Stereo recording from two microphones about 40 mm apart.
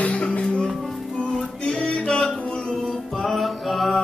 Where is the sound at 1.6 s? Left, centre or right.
Centre.